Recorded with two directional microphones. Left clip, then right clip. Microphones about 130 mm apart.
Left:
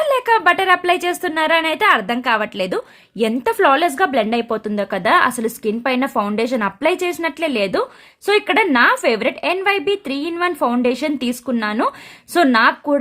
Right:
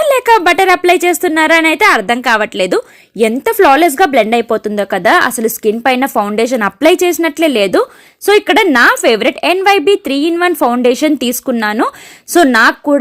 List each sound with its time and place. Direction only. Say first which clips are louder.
0.0 s speech: right 6 dB; 30° right (ahead or behind)